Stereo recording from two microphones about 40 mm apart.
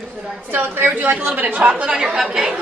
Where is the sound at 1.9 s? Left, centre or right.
Centre.